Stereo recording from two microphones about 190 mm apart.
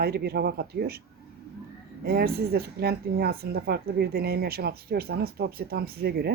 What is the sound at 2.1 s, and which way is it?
Speech, 55° right (ahead or behind).